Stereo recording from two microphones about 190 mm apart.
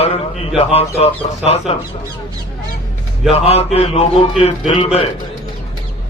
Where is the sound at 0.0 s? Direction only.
30° left (ahead or behind).